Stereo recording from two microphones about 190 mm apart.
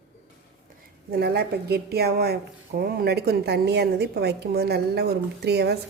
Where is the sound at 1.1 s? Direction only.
55° right (ahead or behind).